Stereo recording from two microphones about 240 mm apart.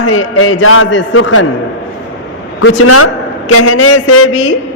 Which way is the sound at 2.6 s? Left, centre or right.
Left.